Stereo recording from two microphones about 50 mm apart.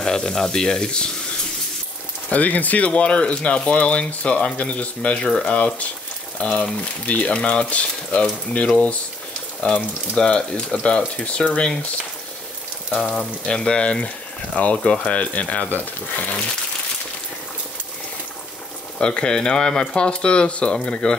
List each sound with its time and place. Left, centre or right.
0.0 s speech: centre
2.2 s speech: left
13.2 s speech: centre; by 16.3 s left
18.9 s speech: centre